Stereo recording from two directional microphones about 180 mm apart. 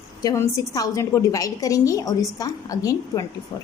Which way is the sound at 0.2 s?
20° left (ahead or behind).